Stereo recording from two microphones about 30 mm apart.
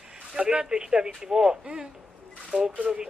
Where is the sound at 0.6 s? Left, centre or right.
Right.